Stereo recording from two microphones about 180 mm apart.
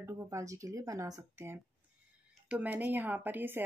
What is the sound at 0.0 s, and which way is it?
Speech, 15° right (ahead or behind).